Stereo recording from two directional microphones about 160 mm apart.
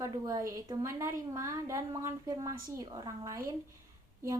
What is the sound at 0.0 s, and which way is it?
A woman's voice, 20° right (ahead or behind).